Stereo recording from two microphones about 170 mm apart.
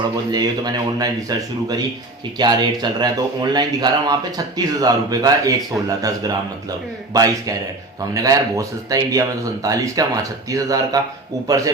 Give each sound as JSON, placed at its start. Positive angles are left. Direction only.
{"t": 0.3, "sound": "speech", "side_deg": -25}